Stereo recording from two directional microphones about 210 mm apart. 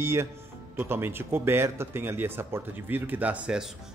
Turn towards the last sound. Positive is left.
turn(degrees=-5)  # may be behind; listen again after turning